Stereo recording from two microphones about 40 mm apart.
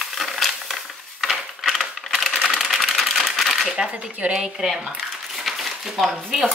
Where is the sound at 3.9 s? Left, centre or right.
Right.